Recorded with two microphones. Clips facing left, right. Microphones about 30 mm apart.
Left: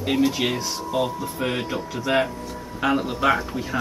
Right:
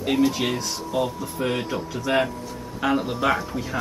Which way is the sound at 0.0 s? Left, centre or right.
Centre.